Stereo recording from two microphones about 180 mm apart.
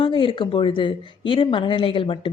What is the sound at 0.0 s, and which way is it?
A woman's voice, 30° left (ahead or behind).